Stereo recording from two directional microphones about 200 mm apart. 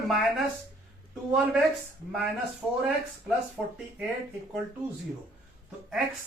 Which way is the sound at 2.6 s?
5° right (ahead or behind).